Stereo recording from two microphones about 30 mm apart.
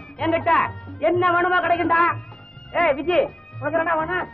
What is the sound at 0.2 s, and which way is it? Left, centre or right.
Speech, left.